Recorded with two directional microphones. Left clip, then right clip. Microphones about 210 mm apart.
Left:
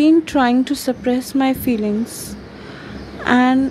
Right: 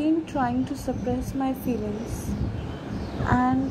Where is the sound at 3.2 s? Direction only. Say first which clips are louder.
Left 9 dB; 40° left (ahead or behind).